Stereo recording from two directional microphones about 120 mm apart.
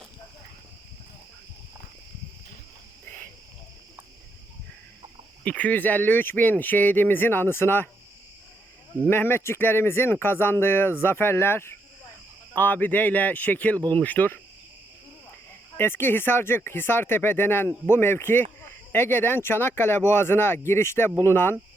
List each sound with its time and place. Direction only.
5.5 s speech: 10° left (ahead or behind)
9.0 s speech: 20° left (ahead or behind)
15.8 s speech: 20° left (ahead or behind)